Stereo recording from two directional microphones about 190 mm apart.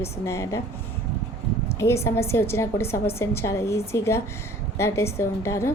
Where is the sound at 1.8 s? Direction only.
15° left (ahead or behind).